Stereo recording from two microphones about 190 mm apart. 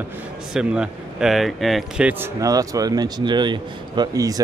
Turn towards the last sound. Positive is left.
turn(degrees=-20)  # may be behind; listen again after turning